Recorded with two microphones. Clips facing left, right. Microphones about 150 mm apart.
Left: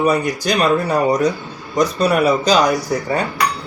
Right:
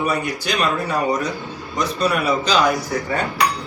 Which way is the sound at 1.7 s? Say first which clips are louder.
Left 5 dB; 40° left (ahead or behind).